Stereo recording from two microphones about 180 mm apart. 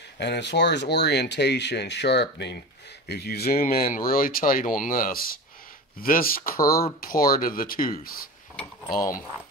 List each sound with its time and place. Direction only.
0.2 s speech: 70° left (ahead or behind); by 8.3 s 50° left (ahead or behind)
8.8 s speech: 20° left (ahead or behind)